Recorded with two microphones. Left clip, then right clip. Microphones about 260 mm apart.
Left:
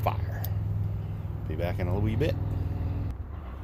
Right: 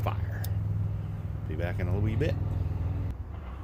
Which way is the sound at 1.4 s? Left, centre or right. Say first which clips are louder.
Left 3 dB; centre.